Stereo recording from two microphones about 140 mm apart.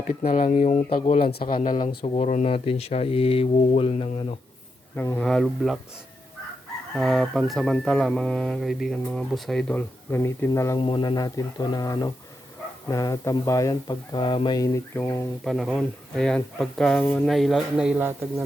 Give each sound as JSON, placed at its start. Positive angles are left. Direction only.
{"t": 0.0, "sound": "speech", "side_deg": 75}
{"t": 1.2, "sound": "a man's voice", "side_deg": 90}
{"t": 2.0, "sound": "speech", "side_deg": 50}
{"t": 4.9, "sound": "speech", "side_deg": 15}
{"t": 5.2, "sound": "chicken", "side_deg": 5}
{"t": 6.9, "sound": "chicken", "side_deg": 0}
{"t": 10.8, "sound": "speech", "side_deg": 40}
{"t": 15.4, "sound": "chicken", "side_deg": 0}
{"t": 17.2, "sound": "chicken", "side_deg": 0}